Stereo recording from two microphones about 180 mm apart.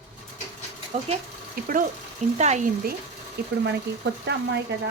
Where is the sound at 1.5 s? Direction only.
50° right (ahead or behind).